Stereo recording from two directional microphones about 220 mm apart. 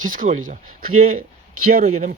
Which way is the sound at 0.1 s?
40° right (ahead or behind).